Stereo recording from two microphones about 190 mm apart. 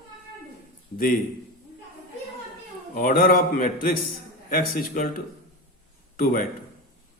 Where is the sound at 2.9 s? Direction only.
50° left (ahead or behind).